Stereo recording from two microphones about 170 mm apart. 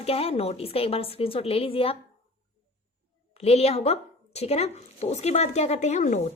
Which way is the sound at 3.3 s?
35° left (ahead or behind).